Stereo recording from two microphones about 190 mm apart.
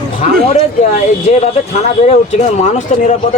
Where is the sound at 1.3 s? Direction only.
35° left (ahead or behind).